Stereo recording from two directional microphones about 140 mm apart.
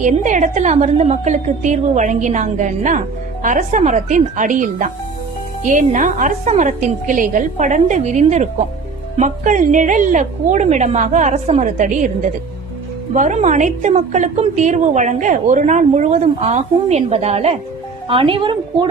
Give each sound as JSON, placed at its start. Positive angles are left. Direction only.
{"t": 0.0, "sound": "a woman's voice", "side_deg": -60}